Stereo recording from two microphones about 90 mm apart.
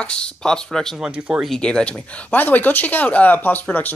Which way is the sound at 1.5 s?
10° left (ahead or behind).